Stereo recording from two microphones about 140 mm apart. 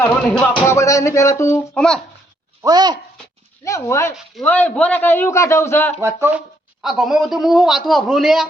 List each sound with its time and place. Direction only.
0.0 s a man's voice: 10° left (ahead or behind)
0.7 s music: 20° left (ahead or behind)
1.7 s a man's voice: 5° left (ahead or behind)
2.6 s speech: 30° right (ahead or behind)
3.6 s music: 20° left (ahead or behind)
4.4 s a man's voice: 10° left (ahead or behind)
6.0 s speech: 20° right (ahead or behind)
6.8 s a man's voice: 5° right (ahead or behind)